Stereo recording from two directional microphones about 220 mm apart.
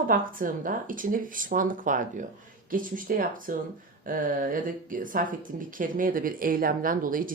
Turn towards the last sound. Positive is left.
turn(degrees=-40)  # may be behind; listen again after turning